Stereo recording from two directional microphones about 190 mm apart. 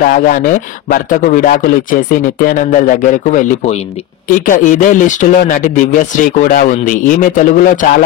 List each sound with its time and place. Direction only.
0.0 s speech: 45° left (ahead or behind)